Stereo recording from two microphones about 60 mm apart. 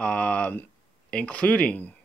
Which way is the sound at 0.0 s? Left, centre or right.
Centre.